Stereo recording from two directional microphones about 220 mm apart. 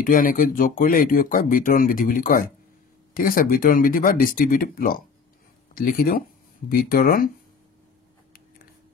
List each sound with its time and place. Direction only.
0.0 s speech: 40° left (ahead or behind)